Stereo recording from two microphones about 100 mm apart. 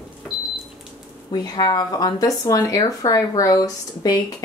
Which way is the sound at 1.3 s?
40° left (ahead or behind).